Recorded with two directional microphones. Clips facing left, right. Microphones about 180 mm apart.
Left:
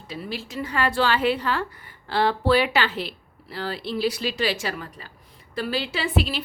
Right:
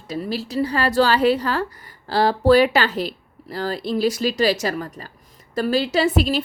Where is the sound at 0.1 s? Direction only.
40° right (ahead or behind).